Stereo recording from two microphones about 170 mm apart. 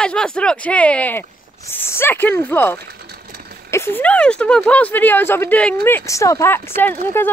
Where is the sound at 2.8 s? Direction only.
70° right (ahead or behind).